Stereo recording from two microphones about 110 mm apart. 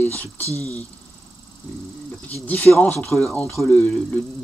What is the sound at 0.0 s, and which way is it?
Speech, 15° left (ahead or behind).